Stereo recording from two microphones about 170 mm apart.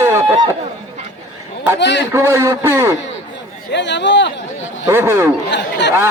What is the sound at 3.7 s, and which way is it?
Speech, 90° left.